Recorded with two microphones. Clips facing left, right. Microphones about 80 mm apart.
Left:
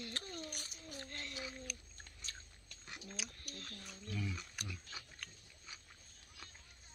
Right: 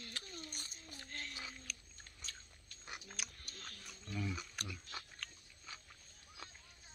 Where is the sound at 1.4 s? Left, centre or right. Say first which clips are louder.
Left 3 dB; centre.